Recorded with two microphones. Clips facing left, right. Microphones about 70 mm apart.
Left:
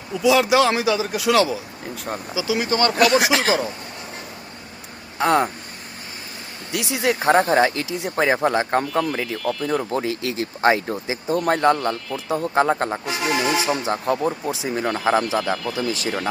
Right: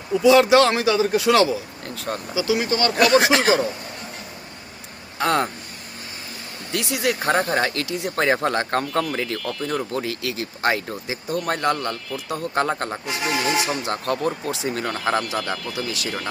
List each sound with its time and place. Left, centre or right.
0.2 s speech: centre
2.6 s speech: left
3.0 s speech: centre
5.1 s speech: centre
6.7 s speech: left
12.9 s speech: centre
15.7 s speech: left